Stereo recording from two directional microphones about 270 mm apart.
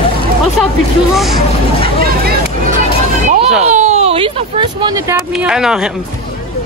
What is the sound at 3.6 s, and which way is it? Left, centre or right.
Speech, right.